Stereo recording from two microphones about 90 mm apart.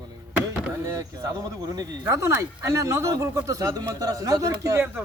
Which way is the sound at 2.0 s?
30° right (ahead or behind).